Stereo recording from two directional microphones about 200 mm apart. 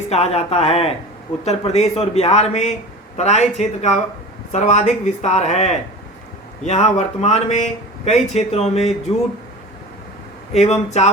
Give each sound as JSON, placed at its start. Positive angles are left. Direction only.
{"t": 0.1, "sound": "speech", "side_deg": 30}
{"t": 10.5, "sound": "speech", "side_deg": 35}